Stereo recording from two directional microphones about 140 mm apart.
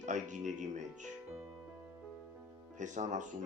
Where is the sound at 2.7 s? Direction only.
60° right (ahead or behind).